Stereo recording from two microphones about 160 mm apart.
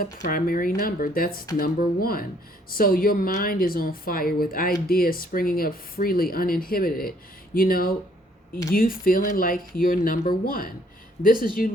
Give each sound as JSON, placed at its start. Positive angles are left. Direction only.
{"t": 0.0, "sound": "speech", "side_deg": 60}